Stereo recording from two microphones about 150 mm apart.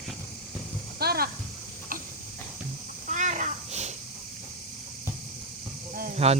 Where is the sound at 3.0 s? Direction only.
55° right (ahead or behind).